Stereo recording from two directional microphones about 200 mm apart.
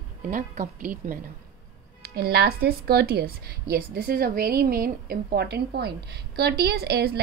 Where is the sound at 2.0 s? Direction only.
55° right (ahead or behind).